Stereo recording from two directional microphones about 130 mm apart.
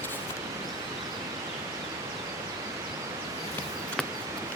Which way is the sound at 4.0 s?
5° left (ahead or behind).